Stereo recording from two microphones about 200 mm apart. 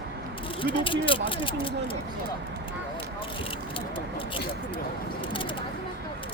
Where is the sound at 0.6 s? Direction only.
25° left (ahead or behind).